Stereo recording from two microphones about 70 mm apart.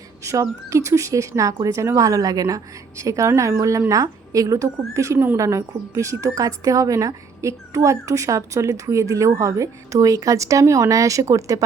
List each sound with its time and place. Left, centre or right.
0.3 s speech: right
3.0 s speech: right